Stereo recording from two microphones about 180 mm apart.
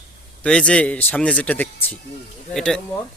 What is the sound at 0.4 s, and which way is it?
Speech, 5° left (ahead or behind).